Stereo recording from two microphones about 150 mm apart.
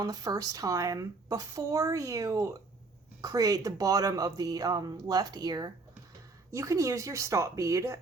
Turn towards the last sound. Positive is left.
turn(degrees=-20)  # may be behind; listen again after turning